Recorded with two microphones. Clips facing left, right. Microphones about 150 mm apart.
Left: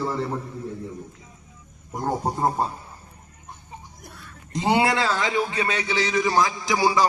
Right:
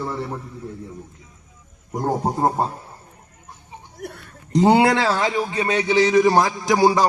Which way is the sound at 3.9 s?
70° right (ahead or behind).